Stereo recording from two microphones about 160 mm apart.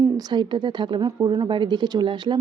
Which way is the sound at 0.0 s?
25° right (ahead or behind).